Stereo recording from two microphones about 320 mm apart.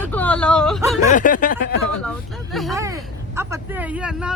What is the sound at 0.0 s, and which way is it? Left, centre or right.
Whimper, centre.